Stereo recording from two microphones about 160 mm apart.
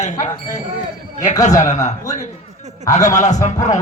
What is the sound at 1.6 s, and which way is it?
Speech, 45° left (ahead or behind).